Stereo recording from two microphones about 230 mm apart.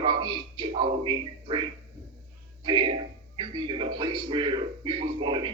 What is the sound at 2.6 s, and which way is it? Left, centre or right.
Speech, centre.